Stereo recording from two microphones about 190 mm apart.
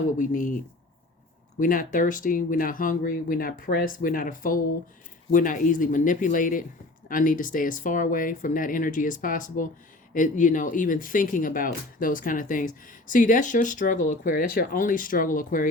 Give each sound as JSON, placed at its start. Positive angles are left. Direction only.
{"t": 0.2, "sound": "speech", "side_deg": 40}